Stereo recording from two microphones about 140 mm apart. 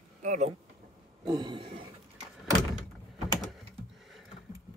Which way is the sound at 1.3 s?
30° right (ahead or behind).